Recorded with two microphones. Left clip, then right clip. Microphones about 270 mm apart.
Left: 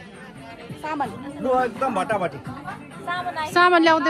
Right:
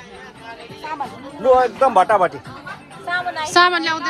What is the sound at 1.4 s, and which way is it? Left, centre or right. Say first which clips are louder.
A man's voice: right 8 dB; right.